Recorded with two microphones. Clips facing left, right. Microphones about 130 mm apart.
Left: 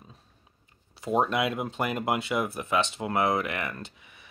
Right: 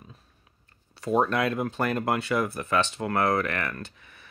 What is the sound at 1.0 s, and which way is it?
Speech, 20° left (ahead or behind).